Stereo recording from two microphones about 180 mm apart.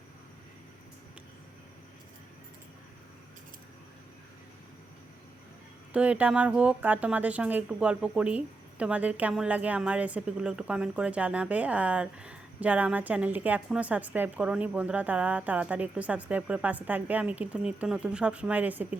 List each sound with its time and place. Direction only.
5.9 s speech: 5° right (ahead or behind)